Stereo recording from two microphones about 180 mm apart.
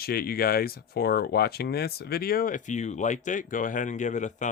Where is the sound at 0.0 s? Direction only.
60° left (ahead or behind).